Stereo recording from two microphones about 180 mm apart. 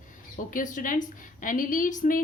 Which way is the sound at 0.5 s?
45° left (ahead or behind).